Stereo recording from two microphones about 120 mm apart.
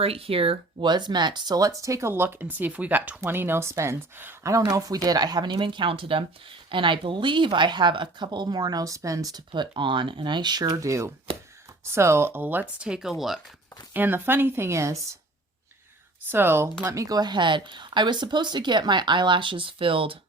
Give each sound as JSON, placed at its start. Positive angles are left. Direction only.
{"t": 0.0, "sound": "speech", "side_deg": -55}
{"t": 9.5, "sound": "speech", "side_deg": -45}
{"t": 13.9, "sound": "speech", "side_deg": -15}
{"t": 16.3, "sound": "speech", "side_deg": -20}